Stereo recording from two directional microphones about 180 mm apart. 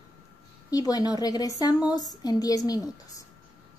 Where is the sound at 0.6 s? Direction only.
20° left (ahead or behind).